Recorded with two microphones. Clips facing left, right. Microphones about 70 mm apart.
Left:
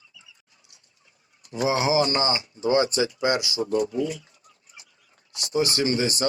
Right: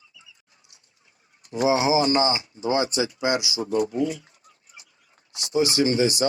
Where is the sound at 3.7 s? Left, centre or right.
Right.